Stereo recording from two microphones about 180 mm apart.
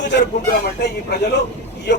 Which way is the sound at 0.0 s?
70° left (ahead or behind).